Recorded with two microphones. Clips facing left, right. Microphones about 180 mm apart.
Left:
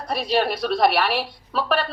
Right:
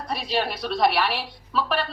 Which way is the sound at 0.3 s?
50° left (ahead or behind).